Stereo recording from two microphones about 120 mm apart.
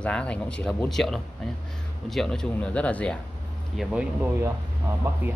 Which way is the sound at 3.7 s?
5° right (ahead or behind).